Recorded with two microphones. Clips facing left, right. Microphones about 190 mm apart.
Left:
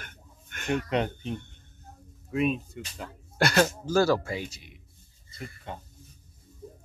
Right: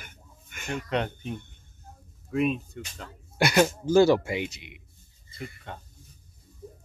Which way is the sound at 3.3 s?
10° right (ahead or behind).